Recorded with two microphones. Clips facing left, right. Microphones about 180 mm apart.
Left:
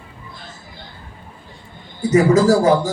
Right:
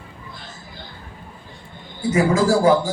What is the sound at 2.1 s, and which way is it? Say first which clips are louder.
Speech: left 5 dB; 40° left (ahead or behind).